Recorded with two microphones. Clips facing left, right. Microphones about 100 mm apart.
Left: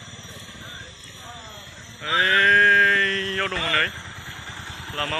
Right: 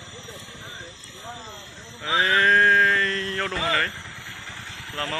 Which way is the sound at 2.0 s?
20° right (ahead or behind).